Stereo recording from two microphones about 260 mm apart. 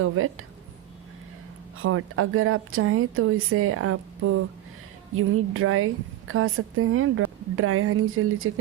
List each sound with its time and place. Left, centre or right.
0.0 s a woman's voice: right
1.8 s a woman's voice: right